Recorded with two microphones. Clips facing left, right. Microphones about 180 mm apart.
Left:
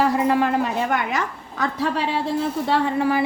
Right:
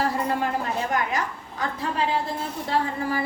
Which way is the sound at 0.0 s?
75° left (ahead or behind).